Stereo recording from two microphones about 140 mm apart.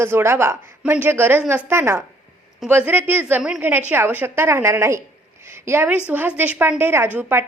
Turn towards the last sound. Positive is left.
turn(degrees=-15)  # may be behind; listen again after turning